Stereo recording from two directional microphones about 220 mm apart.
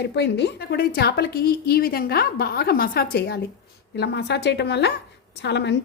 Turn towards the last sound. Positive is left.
turn(degrees=50)  # may be behind; listen again after turning